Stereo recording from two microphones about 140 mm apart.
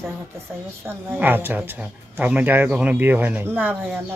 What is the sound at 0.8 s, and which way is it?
Speech, 15° right (ahead or behind).